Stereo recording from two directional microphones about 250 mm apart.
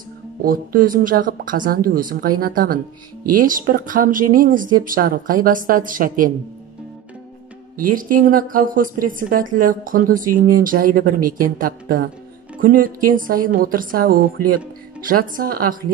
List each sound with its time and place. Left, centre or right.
0.4 s speech: right
7.7 s speech: right